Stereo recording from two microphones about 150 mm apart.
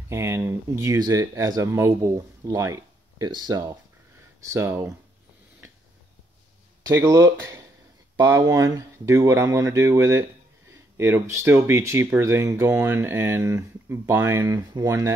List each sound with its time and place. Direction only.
0.1 s speech: 15° right (ahead or behind)
6.9 s speech: 20° right (ahead or behind)